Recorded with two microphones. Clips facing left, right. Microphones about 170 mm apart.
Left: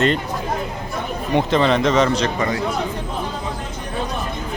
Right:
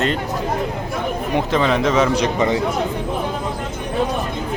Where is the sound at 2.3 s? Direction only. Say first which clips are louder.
Right 4 dB; 20° right (ahead or behind).